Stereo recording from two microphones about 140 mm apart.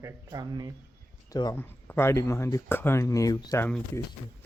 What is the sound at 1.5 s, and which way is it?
Speech, 15° left (ahead or behind).